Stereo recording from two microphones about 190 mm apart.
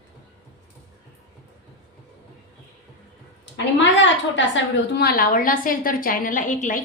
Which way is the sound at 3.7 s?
75° left (ahead or behind).